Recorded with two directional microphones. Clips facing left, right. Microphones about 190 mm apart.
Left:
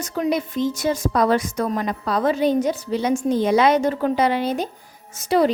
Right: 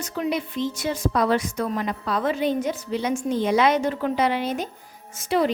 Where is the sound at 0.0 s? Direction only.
40° left (ahead or behind).